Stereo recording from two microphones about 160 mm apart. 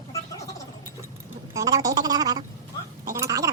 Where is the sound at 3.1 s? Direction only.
20° right (ahead or behind).